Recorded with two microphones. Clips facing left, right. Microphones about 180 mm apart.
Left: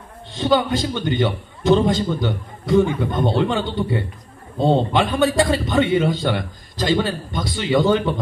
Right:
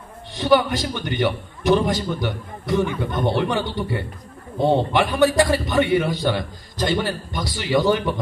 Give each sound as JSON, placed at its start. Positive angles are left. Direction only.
{"t": 0.3, "sound": "a man's voice", "side_deg": 20}